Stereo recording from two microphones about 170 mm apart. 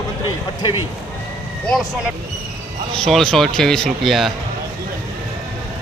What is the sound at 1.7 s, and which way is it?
Speech, centre (ahead or behind).